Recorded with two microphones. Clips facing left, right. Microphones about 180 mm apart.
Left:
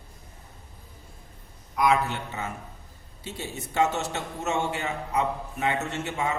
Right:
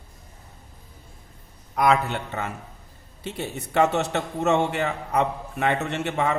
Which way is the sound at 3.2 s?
60° right (ahead or behind).